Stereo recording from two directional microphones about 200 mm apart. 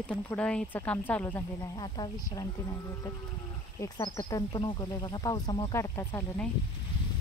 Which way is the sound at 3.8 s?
20° left (ahead or behind).